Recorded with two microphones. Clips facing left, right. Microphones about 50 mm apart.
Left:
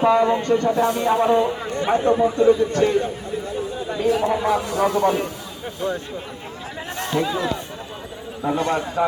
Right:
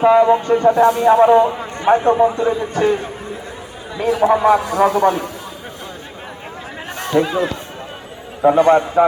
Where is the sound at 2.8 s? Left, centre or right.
Right.